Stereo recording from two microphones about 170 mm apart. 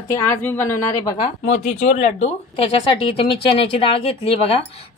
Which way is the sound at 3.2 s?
30° left (ahead or behind).